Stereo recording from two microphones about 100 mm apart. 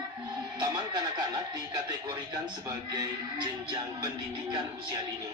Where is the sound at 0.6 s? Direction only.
40° right (ahead or behind).